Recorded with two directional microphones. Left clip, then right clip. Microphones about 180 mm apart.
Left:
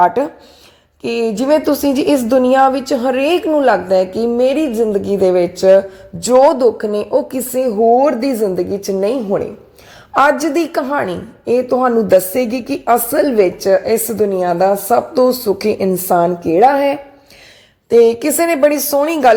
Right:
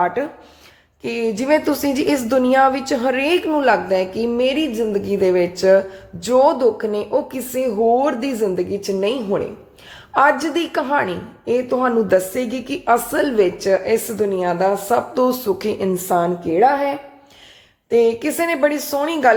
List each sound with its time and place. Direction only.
0.0 s a woman's voice: 35° left (ahead or behind)
1.0 s a woman's voice: 25° left (ahead or behind); by 16.7 s 40° left (ahead or behind)
17.8 s a woman's voice: 35° left (ahead or behind)